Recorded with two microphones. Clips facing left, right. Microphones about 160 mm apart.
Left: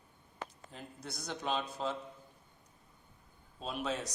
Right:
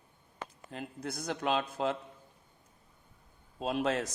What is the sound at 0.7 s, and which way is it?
Speech, 90° right.